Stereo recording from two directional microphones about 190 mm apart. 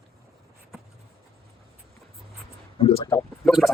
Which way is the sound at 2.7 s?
30° left (ahead or behind).